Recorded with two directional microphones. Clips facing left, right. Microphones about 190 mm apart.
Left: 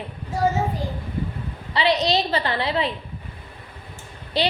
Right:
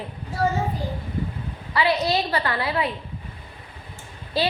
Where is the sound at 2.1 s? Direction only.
25° left (ahead or behind).